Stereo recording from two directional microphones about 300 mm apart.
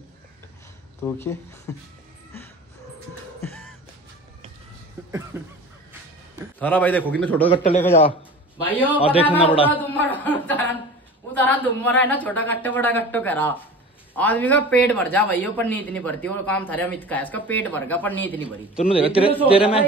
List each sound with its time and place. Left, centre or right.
1.0 s speech: centre
5.0 s a sound: centre
6.6 s a man's voice: centre
7.4 s a man's voice: centre
8.6 s a man's voice: centre
8.9 s speech: centre
9.7 s chuckle: centre
11.3 s a man's voice: centre
18.9 s a man's voice: centre